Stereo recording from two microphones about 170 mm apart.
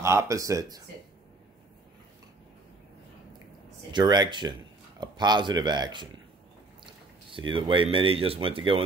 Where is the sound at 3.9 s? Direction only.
25° right (ahead or behind).